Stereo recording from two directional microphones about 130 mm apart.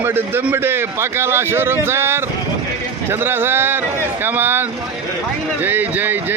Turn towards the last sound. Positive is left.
turn(degrees=-15)  # may be behind; listen again after turning